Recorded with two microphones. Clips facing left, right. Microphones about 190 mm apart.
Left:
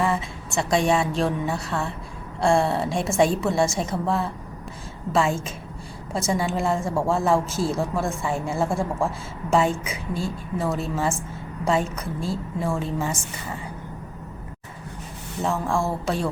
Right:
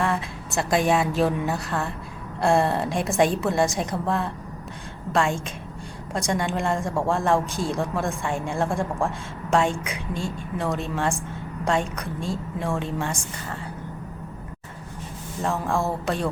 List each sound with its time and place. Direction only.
0.0 s a woman's voice: centre (ahead or behind)
15.4 s a woman's voice: centre (ahead or behind)